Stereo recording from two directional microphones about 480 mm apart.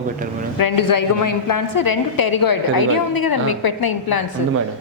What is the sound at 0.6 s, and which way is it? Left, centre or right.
A woman's voice, left.